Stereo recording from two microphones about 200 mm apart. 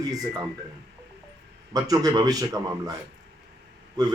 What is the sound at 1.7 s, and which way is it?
A man's voice, 20° right (ahead or behind).